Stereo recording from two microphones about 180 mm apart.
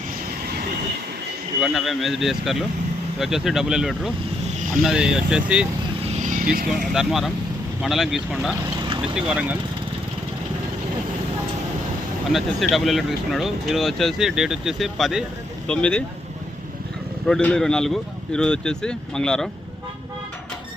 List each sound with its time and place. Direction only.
1.6 s speech: centre (ahead or behind)
6.3 s vehicle: 55° right (ahead or behind)
6.7 s speech: centre (ahead or behind)
12.3 s speech: centre (ahead or behind)
17.2 s speech: 5° left (ahead or behind)